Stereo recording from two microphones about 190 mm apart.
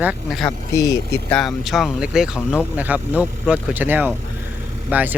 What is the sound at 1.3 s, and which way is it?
Speech, centre (ahead or behind).